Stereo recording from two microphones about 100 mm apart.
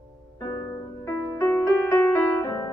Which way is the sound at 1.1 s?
20° left (ahead or behind).